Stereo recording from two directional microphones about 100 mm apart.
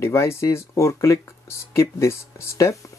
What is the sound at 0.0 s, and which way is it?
Speech, 30° left (ahead or behind).